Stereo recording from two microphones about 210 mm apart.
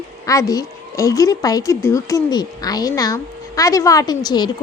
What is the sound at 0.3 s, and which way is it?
A woman's voice, 15° left (ahead or behind).